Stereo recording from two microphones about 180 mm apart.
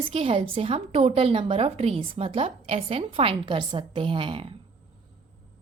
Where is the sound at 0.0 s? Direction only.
30° right (ahead or behind).